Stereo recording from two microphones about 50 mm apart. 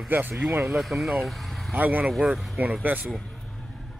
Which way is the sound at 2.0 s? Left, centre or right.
Centre.